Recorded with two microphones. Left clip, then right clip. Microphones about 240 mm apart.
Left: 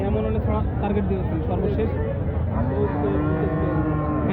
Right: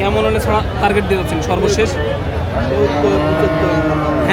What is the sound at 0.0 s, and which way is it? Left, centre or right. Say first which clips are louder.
Speech: right 11 dB; right.